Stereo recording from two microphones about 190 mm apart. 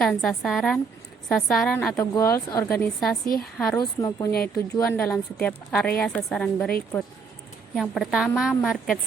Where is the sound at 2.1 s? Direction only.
15° left (ahead or behind).